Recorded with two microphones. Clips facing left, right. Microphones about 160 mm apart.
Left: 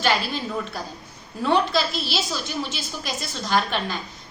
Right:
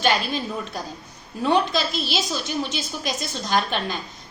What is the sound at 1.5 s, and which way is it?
A woman's voice, 15° right (ahead or behind).